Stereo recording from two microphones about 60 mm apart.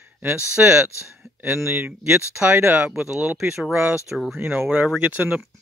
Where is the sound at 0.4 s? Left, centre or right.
Centre.